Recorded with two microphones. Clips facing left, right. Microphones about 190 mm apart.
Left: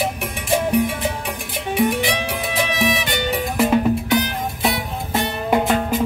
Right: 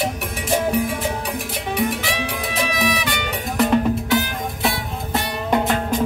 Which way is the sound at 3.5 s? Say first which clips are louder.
Even; centre (ahead or behind).